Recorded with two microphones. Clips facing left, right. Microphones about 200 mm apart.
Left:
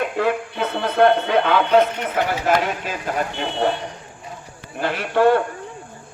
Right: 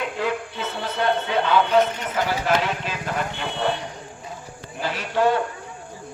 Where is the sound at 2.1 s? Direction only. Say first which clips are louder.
Left 3 dB; 45° left (ahead or behind).